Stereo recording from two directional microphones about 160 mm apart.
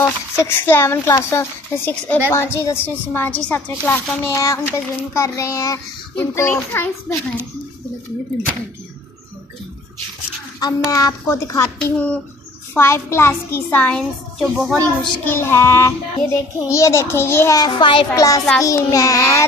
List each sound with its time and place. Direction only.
0.0 s a woman's voice: 15° left (ahead or behind)
10.6 s a woman's voice: 20° left (ahead or behind)
11.8 s a woman's voice: 10° left (ahead or behind)
15.2 s a woman's voice: 15° left (ahead or behind)
17.6 s a child's voice: 30° left (ahead or behind)
18.1 s a woman's voice: 20° left (ahead or behind)